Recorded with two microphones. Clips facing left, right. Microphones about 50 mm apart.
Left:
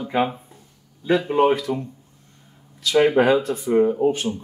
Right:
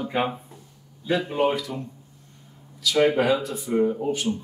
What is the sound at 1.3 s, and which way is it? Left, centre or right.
Speech, left.